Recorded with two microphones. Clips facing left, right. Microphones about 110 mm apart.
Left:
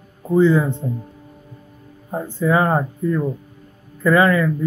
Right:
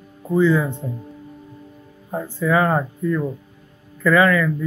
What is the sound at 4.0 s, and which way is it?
Speech, 20° left (ahead or behind).